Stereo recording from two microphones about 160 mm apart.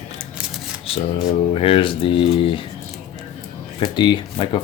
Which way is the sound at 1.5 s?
35° left (ahead or behind).